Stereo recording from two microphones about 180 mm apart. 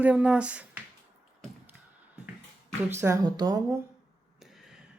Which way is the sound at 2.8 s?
15° right (ahead or behind).